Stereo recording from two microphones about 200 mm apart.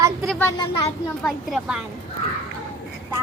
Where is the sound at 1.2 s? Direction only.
Centre (ahead or behind).